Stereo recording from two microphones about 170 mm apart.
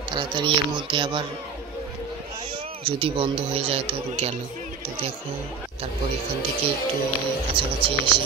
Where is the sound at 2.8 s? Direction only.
30° right (ahead or behind).